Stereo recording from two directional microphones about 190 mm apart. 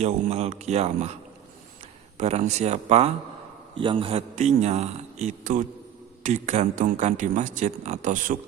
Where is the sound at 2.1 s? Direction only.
35° right (ahead or behind).